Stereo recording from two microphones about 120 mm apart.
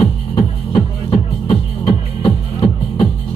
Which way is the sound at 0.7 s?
45° left (ahead or behind).